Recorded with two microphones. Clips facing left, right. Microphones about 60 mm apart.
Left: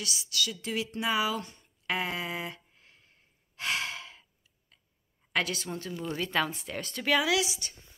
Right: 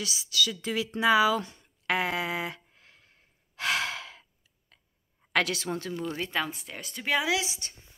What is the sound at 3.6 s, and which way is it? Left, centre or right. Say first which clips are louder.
Sigh: right 4 dB; right.